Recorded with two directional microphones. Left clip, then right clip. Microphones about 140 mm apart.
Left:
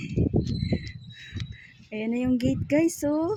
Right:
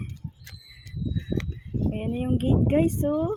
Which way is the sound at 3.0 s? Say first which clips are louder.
Even; 30° left (ahead or behind).